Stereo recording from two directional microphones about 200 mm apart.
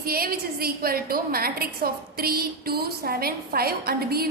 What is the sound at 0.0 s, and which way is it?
A woman's voice, 50° right (ahead or behind).